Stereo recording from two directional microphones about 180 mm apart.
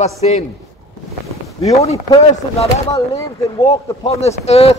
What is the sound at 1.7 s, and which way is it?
Speech, 35° left (ahead or behind).